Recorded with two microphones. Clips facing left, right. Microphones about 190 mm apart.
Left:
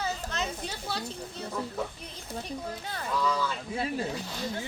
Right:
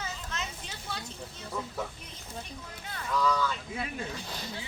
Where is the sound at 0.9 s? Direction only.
35° left (ahead or behind).